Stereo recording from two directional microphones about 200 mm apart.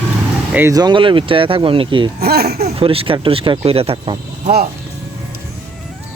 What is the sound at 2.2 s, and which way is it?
Speech, 50° right (ahead or behind).